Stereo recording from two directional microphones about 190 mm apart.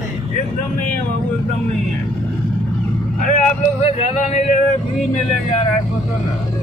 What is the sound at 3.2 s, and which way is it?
Speech, 40° left (ahead or behind).